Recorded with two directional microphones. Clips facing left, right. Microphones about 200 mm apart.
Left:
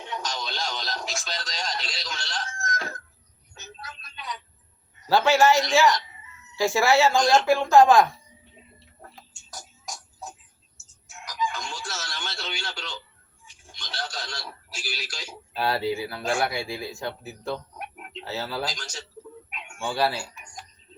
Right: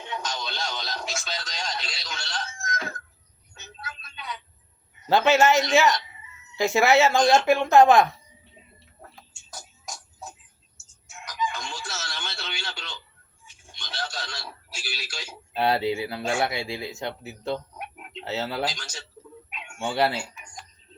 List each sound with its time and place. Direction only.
0.1 s radio: centre (ahead or behind)
3.5 s a sound: centre (ahead or behind)
5.0 s speech: 20° right (ahead or behind)
11.1 s crowing: centre (ahead or behind)
13.9 s radio: 5° right (ahead or behind)
15.5 s speech: 20° right (ahead or behind)
19.8 s speech: 20° right (ahead or behind)